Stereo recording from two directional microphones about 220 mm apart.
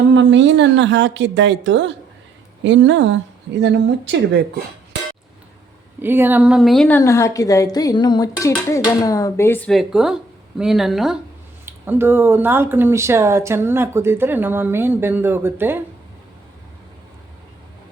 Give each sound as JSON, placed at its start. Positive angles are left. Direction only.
{"t": 0.1, "sound": "a woman's voice", "side_deg": -55}
{"t": 6.0, "sound": "a woman's voice", "side_deg": -10}